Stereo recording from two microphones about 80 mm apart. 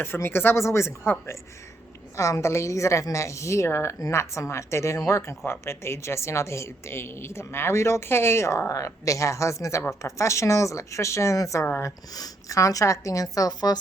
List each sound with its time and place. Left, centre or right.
0.0 s a woman's voice: left
2.1 s a woman's voice: left